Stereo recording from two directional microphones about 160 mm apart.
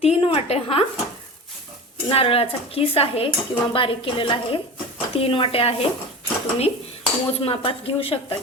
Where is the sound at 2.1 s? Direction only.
35° left (ahead or behind).